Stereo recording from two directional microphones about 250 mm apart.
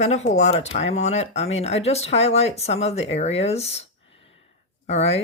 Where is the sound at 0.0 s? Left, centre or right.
Left.